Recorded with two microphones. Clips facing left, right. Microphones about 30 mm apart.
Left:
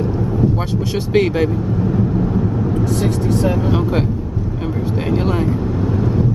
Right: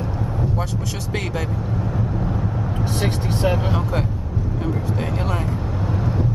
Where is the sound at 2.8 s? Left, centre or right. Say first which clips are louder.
Left 3 dB; right.